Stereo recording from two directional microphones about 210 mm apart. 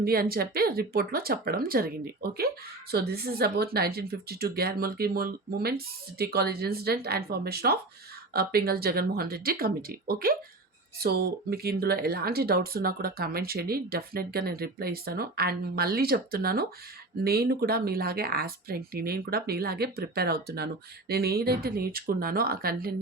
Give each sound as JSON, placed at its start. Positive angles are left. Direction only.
{"t": 0.0, "sound": "speech", "side_deg": -45}
{"t": 2.9, "sound": "speech", "side_deg": -50}